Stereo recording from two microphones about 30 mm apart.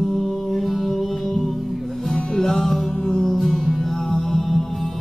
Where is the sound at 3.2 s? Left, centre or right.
Centre.